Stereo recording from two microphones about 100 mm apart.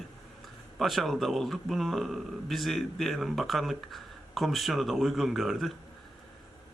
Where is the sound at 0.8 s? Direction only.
Centre (ahead or behind).